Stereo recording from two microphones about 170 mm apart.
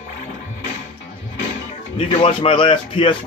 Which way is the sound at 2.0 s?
30° left (ahead or behind).